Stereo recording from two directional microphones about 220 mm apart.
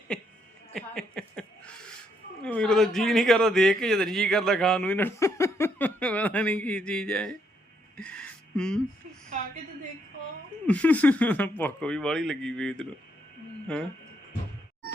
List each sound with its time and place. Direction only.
0.1 s a woman's voice: 5° left (ahead or behind)
0.7 s a sound: 5° left (ahead or behind)
2.4 s a man's voice: 5° left (ahead or behind)
7.9 s music: 5° left (ahead or behind)
10.7 s a man's voice: 5° left (ahead or behind)